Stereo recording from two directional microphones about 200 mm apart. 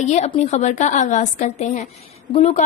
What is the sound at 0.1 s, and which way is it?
A woman's voice, 35° left (ahead or behind).